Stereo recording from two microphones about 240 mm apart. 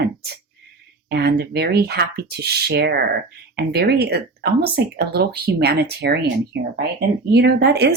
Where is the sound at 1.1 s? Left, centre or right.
Right.